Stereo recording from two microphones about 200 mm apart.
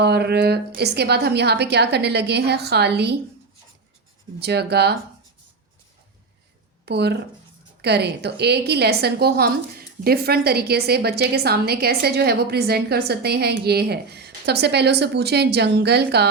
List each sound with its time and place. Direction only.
0.0 s a woman's voice: 55° right (ahead or behind)
4.4 s a woman's voice: 55° right (ahead or behind)
6.8 s a woman's voice: 55° right (ahead or behind)